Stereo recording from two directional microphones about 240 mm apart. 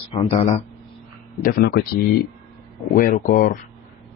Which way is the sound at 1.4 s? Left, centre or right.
Left.